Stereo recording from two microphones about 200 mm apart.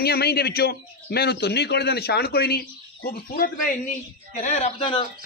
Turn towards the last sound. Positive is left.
turn(degrees=30)  # may be behind; listen again after turning